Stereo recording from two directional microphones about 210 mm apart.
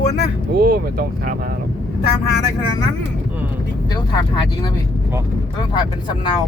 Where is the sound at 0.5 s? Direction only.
45° right (ahead or behind).